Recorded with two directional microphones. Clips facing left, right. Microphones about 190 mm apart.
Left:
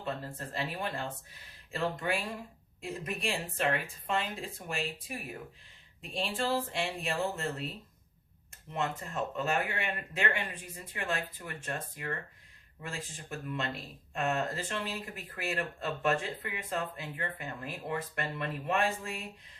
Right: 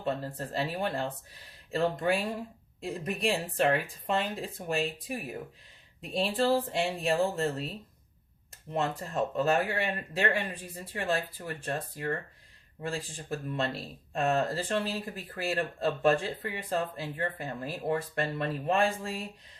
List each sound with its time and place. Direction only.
0.0 s speech: 35° right (ahead or behind)
8.7 s speech: 35° right (ahead or behind)